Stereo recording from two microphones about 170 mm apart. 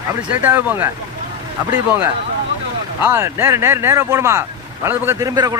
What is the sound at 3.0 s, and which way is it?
Speech, 15° right (ahead or behind).